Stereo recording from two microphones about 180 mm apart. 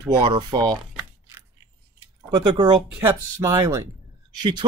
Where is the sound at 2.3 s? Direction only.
25° right (ahead or behind).